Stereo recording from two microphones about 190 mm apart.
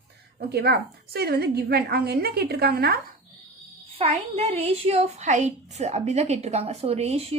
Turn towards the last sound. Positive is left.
turn(degrees=-35)  # may be behind; listen again after turning